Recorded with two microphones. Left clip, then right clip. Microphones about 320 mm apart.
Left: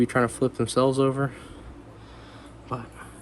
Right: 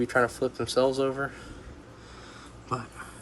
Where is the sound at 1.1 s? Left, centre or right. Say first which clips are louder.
Left 3 dB; left.